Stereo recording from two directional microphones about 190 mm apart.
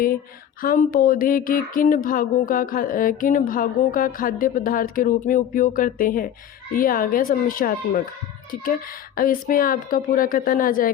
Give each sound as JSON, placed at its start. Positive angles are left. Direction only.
{"t": 0.6, "sound": "a woman's voice", "side_deg": 50}